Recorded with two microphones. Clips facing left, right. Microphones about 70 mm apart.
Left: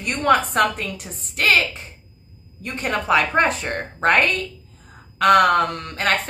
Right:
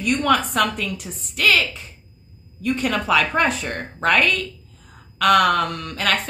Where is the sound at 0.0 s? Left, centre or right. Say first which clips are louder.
Left 1 dB; left.